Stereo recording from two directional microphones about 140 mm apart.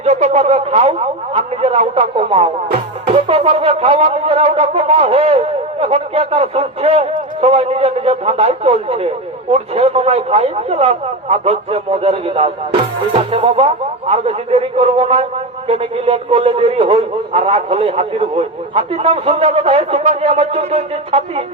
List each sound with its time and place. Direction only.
0.0 s a man's voice: 50° right (ahead or behind)